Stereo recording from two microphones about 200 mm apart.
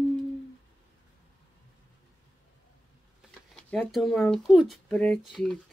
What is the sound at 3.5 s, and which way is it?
Speech, 5° left (ahead or behind).